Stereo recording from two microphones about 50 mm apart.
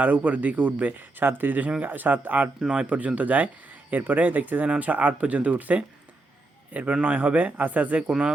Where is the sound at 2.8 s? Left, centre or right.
Right.